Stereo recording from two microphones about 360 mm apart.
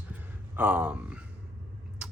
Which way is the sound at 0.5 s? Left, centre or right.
Centre.